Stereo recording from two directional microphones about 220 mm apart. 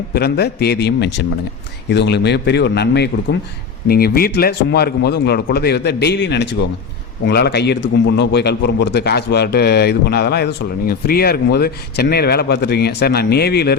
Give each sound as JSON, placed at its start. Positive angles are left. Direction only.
{"t": 0.1, "sound": "a man's voice", "side_deg": 45}